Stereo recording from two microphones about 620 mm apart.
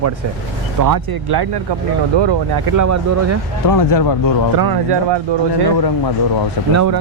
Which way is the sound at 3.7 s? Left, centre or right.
Left.